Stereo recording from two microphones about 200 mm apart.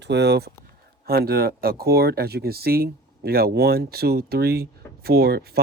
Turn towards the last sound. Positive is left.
turn(degrees=-50)  # may be behind; listen again after turning